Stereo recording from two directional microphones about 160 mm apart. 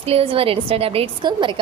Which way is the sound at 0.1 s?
35° right (ahead or behind).